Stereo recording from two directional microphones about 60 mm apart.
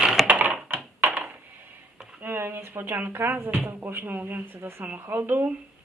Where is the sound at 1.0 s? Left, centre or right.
Right.